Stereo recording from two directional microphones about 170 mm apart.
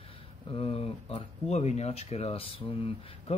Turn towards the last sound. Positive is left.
turn(degrees=35)  # may be behind; listen again after turning